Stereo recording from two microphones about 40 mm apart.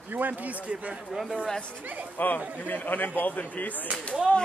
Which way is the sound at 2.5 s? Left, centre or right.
Left.